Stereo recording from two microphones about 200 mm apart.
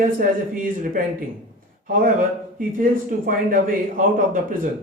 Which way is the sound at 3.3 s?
45° right (ahead or behind).